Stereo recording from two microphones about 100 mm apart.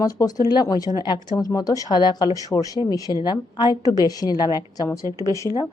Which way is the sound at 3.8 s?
35° left (ahead or behind).